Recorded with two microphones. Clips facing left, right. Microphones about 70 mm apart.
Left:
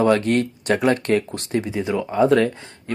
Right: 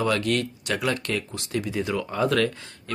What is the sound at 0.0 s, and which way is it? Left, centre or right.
Speech, left.